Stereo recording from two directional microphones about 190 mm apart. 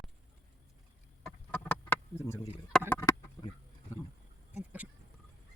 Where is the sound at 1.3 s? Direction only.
5° left (ahead or behind).